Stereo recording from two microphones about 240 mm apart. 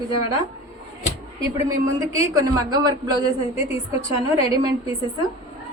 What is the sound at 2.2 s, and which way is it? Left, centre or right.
Speech, centre.